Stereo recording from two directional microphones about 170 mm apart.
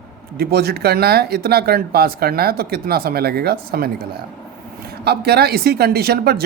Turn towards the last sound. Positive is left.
turn(degrees=-65)  # may be behind; listen again after turning